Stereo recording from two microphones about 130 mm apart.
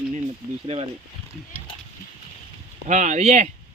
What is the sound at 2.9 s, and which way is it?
Speech, 70° right (ahead or behind).